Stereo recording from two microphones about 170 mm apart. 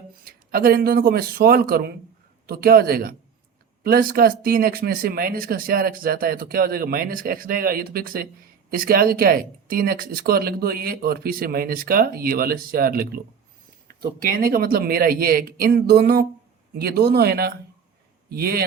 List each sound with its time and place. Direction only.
0.3 s speech: 60° right (ahead or behind)